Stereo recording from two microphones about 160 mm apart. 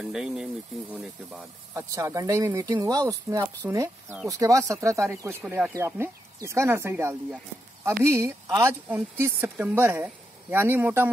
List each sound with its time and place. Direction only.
0.0 s speech: 5° right (ahead or behind)
1.7 s speech: 20° right (ahead or behind)